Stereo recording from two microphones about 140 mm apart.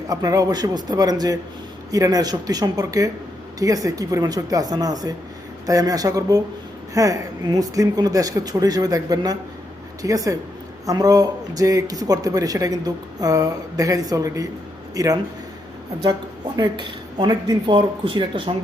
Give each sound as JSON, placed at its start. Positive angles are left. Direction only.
{"t": 0.1, "sound": "speech", "side_deg": -25}
{"t": 16.6, "sound": "speech", "side_deg": -30}